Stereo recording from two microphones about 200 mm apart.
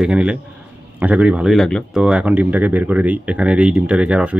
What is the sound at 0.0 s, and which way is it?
A man's voice, 5° right (ahead or behind).